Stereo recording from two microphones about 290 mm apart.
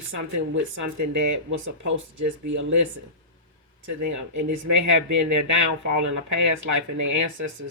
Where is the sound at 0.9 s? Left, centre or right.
Right.